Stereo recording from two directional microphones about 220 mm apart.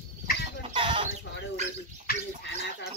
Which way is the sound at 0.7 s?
20° right (ahead or behind).